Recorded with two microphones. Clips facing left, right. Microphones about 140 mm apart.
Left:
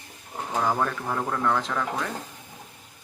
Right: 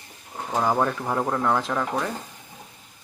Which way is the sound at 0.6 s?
20° right (ahead or behind).